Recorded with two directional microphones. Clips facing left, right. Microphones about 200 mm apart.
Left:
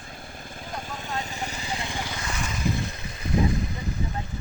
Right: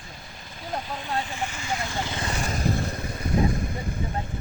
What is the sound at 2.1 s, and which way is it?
Vehicle, 40° right (ahead or behind).